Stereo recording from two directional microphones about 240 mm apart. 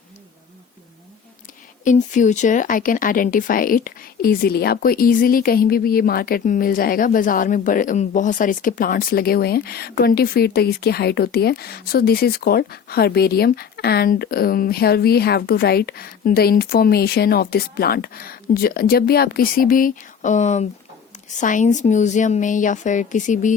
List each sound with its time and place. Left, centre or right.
1.8 s speech: left